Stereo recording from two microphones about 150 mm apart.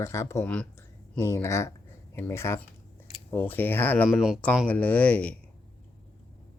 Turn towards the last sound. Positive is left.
turn(degrees=10)  # may be behind; listen again after turning